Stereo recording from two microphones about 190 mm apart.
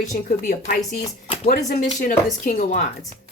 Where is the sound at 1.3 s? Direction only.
35° left (ahead or behind).